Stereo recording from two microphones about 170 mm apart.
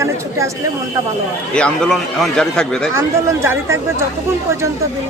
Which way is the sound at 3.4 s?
15° right (ahead or behind).